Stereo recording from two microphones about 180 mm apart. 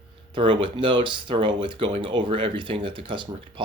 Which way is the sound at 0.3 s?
30° right (ahead or behind).